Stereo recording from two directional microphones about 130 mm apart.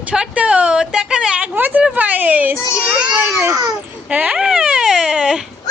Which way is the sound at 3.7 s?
10° right (ahead or behind).